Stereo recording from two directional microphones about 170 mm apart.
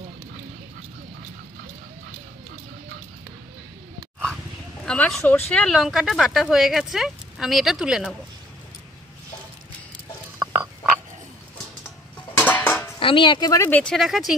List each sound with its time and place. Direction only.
4.8 s speech: 5° left (ahead or behind)
12.4 s dishes: 10° left (ahead or behind)
13.0 s speech: 30° left (ahead or behind)
13.5 s speech: 15° left (ahead or behind)